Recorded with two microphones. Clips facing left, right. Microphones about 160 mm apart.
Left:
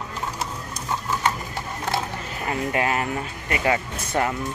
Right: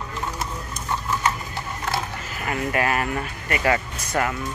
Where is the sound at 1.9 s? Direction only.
25° left (ahead or behind).